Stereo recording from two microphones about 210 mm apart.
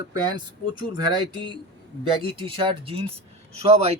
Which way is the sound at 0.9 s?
20° right (ahead or behind).